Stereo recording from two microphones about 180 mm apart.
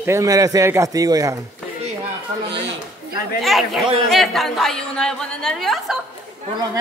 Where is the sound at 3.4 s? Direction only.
Centre (ahead or behind).